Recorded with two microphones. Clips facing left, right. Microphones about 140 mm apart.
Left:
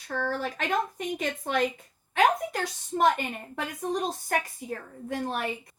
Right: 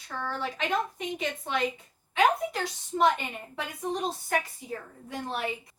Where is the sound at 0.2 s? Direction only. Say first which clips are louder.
Left 2 dB; 50° left (ahead or behind).